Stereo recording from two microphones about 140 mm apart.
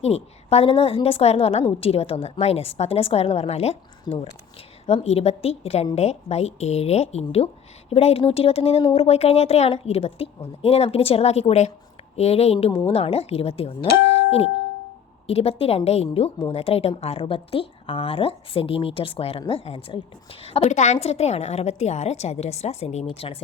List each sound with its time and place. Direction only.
0.0 s a woman's voice: 45° left (ahead or behind)
4.1 s speech: 30° left (ahead or behind)
5.0 s a woman's voice: 50° left (ahead or behind)